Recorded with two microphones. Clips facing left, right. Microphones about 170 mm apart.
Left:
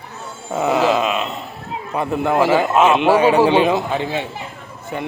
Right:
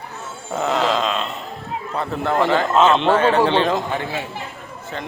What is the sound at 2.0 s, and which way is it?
A man's voice, 10° left (ahead or behind).